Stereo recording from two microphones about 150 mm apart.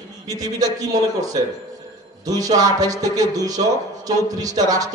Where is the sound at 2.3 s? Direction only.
25° right (ahead or behind).